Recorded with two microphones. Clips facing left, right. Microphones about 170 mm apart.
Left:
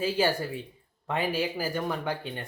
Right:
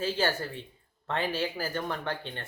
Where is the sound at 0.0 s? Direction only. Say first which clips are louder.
Left 3 dB; 10° left (ahead or behind).